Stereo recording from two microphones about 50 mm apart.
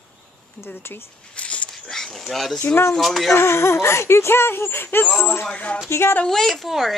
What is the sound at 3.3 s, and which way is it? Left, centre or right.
Speech, left.